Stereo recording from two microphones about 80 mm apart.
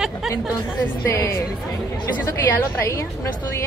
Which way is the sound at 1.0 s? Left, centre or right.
Left.